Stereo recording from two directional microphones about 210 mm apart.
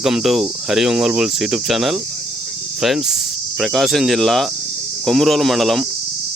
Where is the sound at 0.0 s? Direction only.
Centre (ahead or behind).